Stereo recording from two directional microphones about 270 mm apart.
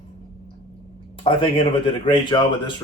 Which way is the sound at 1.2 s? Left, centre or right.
Centre.